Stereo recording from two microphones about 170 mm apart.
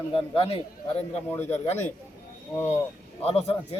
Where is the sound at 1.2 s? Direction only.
10° left (ahead or behind).